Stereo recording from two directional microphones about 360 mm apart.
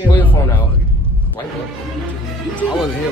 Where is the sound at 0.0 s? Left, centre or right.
Centre.